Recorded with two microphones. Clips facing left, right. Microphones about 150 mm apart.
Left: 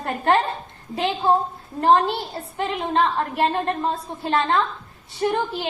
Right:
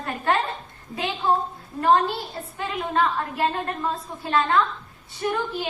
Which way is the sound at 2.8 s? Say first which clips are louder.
Left 1 dB; 25° left (ahead or behind).